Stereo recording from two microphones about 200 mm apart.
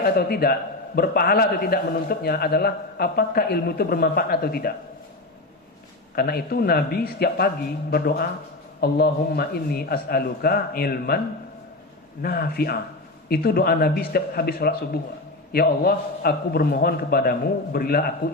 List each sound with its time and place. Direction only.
0.0 s a man's voice: 50° left (ahead or behind)
6.1 s a man's voice: 50° left (ahead or behind)
12.2 s a man's voice: 50° left (ahead or behind)